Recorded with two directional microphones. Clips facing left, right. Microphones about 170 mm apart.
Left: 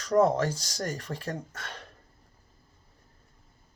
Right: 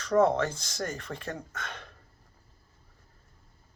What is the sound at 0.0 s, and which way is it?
Speech, 35° left (ahead or behind).